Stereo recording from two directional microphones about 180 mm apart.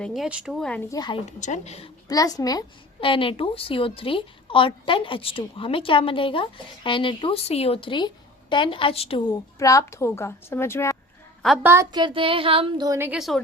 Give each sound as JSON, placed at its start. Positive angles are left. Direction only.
{"t": 0.0, "sound": "speech", "side_deg": 0}
{"t": 0.9, "sound": "a woman's voice", "side_deg": 25}
{"t": 1.4, "sound": "a woman's voice", "side_deg": 40}
{"t": 2.0, "sound": "a woman's voice", "side_deg": 20}
{"t": 11.4, "sound": "a woman's voice", "side_deg": -5}
{"t": 13.0, "sound": "speech", "side_deg": -5}